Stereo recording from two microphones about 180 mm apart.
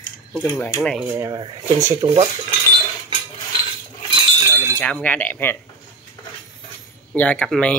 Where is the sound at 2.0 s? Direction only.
30° right (ahead or behind).